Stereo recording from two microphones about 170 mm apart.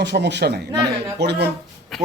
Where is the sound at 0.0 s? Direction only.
90° right.